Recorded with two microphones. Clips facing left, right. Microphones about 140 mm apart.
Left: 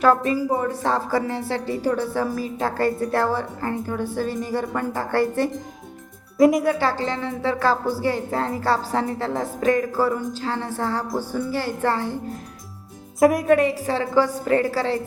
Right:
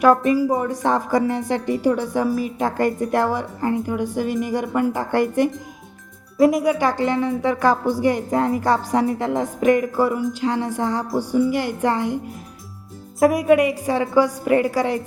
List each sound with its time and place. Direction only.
0.3 s a woman's voice: 15° right (ahead or behind)
6.3 s speech: centre (ahead or behind)
6.7 s a woman's voice: 15° right (ahead or behind)
13.1 s a woman's voice: centre (ahead or behind)
13.5 s a woman's voice: 10° right (ahead or behind)